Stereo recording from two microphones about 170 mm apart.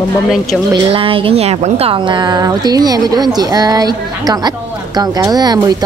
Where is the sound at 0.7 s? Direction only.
30° right (ahead or behind).